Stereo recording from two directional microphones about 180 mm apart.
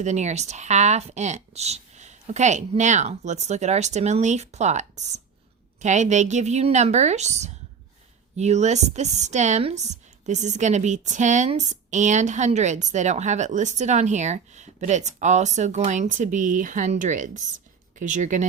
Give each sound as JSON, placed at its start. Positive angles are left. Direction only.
{"t": 0.0, "sound": "a woman's voice", "side_deg": -40}